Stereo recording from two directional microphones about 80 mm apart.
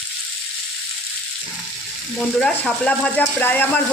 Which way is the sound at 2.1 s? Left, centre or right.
Centre.